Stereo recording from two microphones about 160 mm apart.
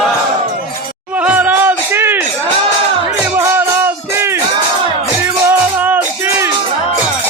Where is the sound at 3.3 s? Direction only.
15° right (ahead or behind).